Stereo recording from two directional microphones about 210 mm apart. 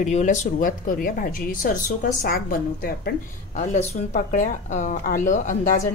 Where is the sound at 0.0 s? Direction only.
35° left (ahead or behind).